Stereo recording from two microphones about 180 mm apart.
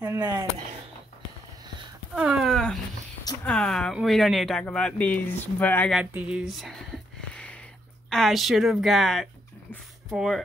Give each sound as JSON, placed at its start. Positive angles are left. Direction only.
{"t": 0.0, "sound": "speech", "side_deg": -15}
{"t": 2.1, "sound": "a sound", "side_deg": -5}
{"t": 3.4, "sound": "speech", "side_deg": 5}
{"t": 5.9, "sound": "speech", "side_deg": -5}
{"t": 7.3, "sound": "a sound", "side_deg": 5}
{"t": 8.1, "sound": "speech", "side_deg": 0}